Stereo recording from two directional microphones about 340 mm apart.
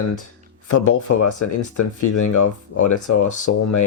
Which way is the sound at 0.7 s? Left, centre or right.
Left.